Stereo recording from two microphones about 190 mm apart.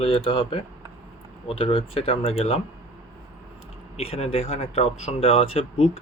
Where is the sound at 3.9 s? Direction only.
30° left (ahead or behind).